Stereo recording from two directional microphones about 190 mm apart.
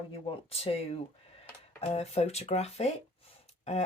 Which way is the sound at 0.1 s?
30° left (ahead or behind).